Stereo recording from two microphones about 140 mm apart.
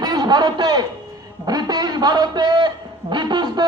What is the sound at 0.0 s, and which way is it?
A man's voice, 30° right (ahead or behind).